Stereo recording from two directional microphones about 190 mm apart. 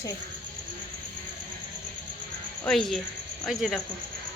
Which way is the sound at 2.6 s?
Centre (ahead or behind).